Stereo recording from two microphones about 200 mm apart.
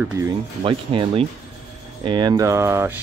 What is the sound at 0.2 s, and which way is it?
Speech, 15° right (ahead or behind).